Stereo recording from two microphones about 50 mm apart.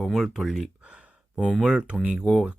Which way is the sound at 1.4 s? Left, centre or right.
Centre.